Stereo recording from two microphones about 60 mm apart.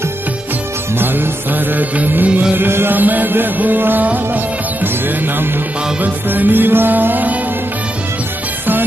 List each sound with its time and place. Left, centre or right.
0.9 s music: right